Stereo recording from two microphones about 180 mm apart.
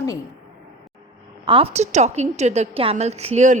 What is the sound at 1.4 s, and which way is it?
A woman's voice, 30° right (ahead or behind).